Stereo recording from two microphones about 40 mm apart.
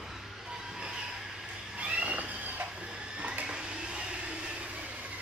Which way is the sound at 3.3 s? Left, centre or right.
Right.